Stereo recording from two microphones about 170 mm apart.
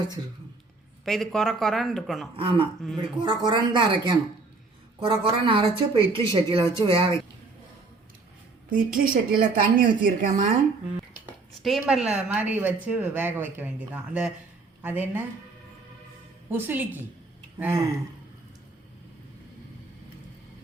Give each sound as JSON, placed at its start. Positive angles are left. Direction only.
{"t": 1.0, "sound": "speech", "side_deg": 0}
{"t": 2.3, "sound": "a woman's voice", "side_deg": -30}
{"t": 8.7, "sound": "a woman's voice", "side_deg": -55}
{"t": 11.5, "sound": "a woman's voice", "side_deg": 0}
{"t": 16.5, "sound": "speech", "side_deg": -10}